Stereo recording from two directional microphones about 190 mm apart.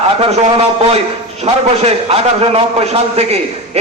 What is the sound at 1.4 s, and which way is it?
A man's voice, 30° right (ahead or behind).